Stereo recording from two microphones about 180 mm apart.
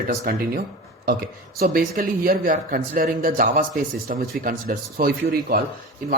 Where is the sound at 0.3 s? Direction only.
60° right (ahead or behind).